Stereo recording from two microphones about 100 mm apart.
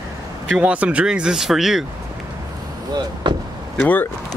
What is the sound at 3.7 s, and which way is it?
Speech, 15° left (ahead or behind).